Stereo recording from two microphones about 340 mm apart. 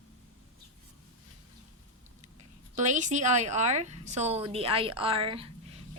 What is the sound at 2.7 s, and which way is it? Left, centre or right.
A woman's voice, right.